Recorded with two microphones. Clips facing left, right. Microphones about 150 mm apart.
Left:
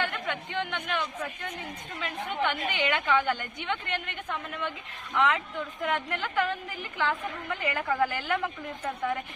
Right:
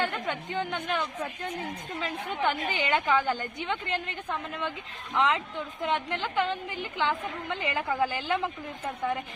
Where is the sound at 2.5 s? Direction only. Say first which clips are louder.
Right 2 dB; 35° right (ahead or behind).